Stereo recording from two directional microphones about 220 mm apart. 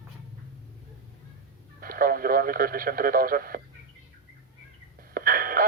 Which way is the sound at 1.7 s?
40° right (ahead or behind).